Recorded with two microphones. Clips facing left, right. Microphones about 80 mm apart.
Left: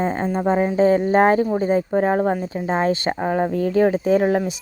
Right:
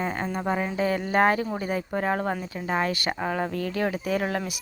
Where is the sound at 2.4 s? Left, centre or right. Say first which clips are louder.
Left 6 dB; left.